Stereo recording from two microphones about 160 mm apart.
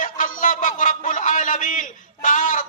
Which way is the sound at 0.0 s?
55° left (ahead or behind).